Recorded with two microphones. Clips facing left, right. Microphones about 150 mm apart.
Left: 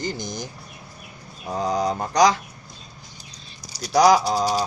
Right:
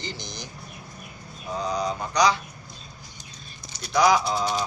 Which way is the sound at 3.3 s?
35° left (ahead or behind).